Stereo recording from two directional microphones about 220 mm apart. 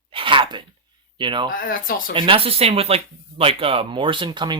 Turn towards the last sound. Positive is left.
turn(degrees=-20)  # may be behind; listen again after turning